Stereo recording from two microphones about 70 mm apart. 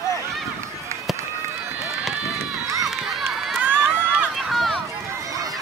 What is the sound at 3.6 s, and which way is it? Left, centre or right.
Crowd, right.